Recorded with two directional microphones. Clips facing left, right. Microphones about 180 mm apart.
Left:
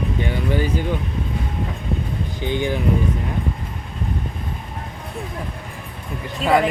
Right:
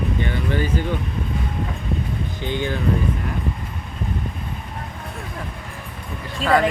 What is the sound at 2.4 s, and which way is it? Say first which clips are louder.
Speech: left 3 dB; 15° left (ahead or behind).